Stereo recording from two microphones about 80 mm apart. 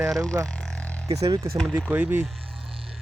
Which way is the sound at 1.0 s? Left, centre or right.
Right.